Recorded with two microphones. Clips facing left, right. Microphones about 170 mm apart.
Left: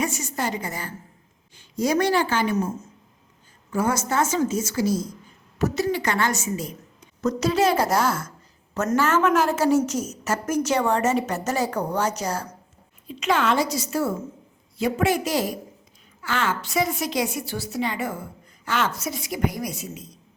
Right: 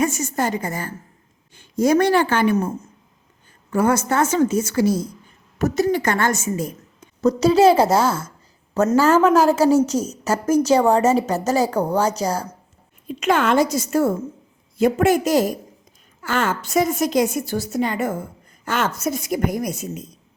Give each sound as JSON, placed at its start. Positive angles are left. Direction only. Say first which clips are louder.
{"t": 0.0, "sound": "a woman's voice", "louder": "right 5 dB", "side_deg": -50}
{"t": 5.5, "sound": "a woman's voice", "louder": "right 4 dB", "side_deg": -45}
{"t": 7.2, "sound": "a woman's voice", "louder": "right 7 dB", "side_deg": -30}
{"t": 13.1, "sound": "a woman's voice", "louder": "right 4 dB", "side_deg": -50}